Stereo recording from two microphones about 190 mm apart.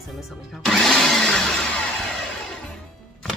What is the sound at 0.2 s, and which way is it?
Speech, centre (ahead or behind).